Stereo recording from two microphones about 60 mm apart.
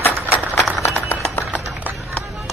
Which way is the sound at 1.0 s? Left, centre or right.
Left.